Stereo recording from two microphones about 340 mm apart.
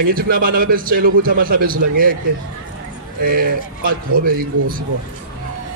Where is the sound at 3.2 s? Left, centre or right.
Right.